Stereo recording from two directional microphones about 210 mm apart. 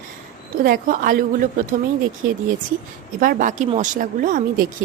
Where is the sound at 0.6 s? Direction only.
40° right (ahead or behind).